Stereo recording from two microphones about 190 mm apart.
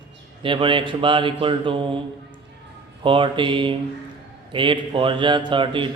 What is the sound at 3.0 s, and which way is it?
Speech, 25° right (ahead or behind).